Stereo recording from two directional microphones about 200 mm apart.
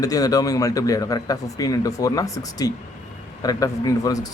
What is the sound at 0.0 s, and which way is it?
A man's voice, 20° left (ahead or behind).